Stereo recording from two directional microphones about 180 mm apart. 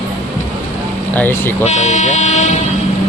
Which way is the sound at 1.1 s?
10° left (ahead or behind).